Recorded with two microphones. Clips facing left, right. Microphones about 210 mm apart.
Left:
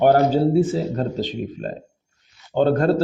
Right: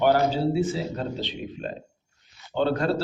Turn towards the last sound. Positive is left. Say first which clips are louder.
# left 6 dB
turn(degrees=50)  # may be behind; listen again after turning